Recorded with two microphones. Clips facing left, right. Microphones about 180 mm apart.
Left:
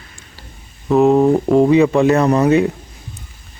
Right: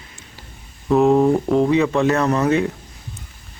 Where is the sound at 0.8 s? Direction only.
Centre (ahead or behind).